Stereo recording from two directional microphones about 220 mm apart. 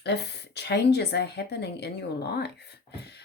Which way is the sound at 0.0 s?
50° left (ahead or behind).